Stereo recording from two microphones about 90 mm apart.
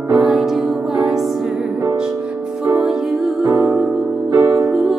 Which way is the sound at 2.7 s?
Centre (ahead or behind).